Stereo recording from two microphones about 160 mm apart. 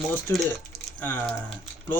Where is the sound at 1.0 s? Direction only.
10° left (ahead or behind).